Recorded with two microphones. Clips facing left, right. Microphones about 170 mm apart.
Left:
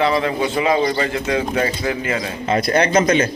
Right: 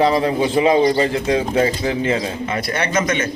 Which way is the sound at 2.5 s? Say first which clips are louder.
Left 7 dB; 35° left (ahead or behind).